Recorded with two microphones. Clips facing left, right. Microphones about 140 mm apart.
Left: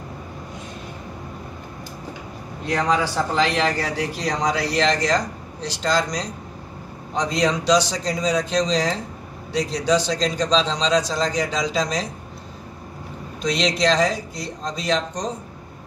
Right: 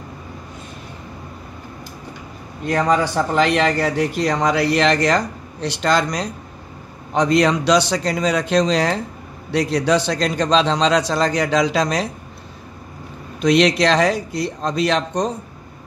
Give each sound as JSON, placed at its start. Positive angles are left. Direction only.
{"t": 2.6, "sound": "a man's voice", "side_deg": -50}
{"t": 13.4, "sound": "a man's voice", "side_deg": -60}